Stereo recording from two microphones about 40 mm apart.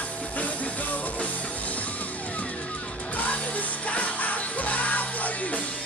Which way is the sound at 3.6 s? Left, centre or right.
Left.